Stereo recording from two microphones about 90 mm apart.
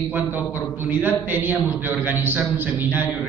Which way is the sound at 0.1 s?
20° right (ahead or behind).